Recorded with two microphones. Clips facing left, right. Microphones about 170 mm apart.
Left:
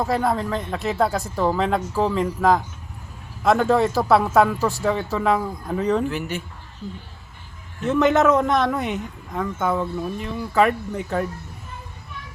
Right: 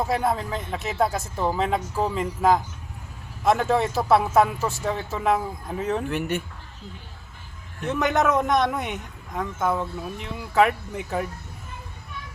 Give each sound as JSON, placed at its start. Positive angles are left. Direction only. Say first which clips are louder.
{"t": 0.0, "sound": "speech", "louder": "left 2 dB", "side_deg": 0}
{"t": 7.8, "sound": "speech", "louder": "left 5 dB", "side_deg": 0}
{"t": 8.4, "sound": "a man's voice", "louder": "left 2 dB", "side_deg": -15}
{"t": 8.6, "sound": "speech", "louder": "left 3 dB", "side_deg": 0}